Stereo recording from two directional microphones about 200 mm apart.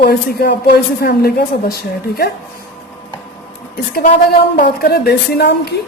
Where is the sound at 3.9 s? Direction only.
45° left (ahead or behind).